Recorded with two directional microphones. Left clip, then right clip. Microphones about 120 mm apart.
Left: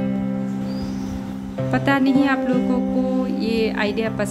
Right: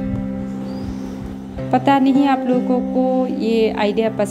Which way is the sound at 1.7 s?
20° right (ahead or behind).